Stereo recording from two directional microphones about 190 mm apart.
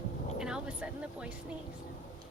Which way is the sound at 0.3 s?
5° right (ahead or behind).